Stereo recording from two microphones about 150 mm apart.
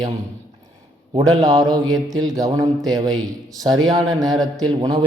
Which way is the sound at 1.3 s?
25° right (ahead or behind).